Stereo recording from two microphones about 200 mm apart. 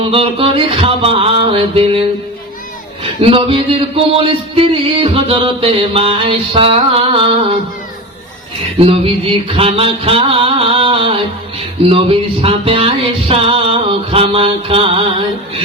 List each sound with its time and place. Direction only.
0.0 s music: 25° right (ahead or behind)
8.8 s music: 30° right (ahead or behind)